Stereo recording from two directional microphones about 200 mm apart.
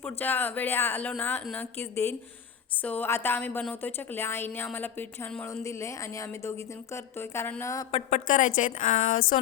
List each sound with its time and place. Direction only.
0.0 s a woman's voice: 10° left (ahead or behind)
7.9 s speech: 30° left (ahead or behind)
8.3 s a woman's voice: 40° left (ahead or behind)